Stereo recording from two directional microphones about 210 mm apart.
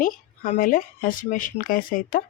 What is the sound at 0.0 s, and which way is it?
Speech, 40° left (ahead or behind).